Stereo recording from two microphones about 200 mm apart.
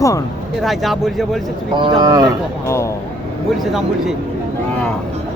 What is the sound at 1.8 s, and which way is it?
Speech, 20° right (ahead or behind).